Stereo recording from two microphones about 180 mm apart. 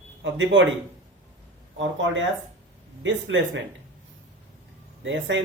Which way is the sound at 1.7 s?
90° right.